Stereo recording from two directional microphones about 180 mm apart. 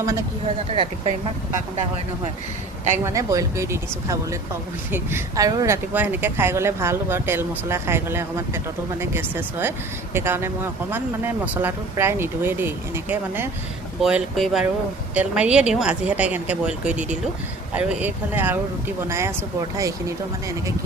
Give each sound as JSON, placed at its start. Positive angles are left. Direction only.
{"t": 0.0, "sound": "speech", "side_deg": -15}
{"t": 0.7, "sound": "speech", "side_deg": -35}
{"t": 3.0, "sound": "speech", "side_deg": -15}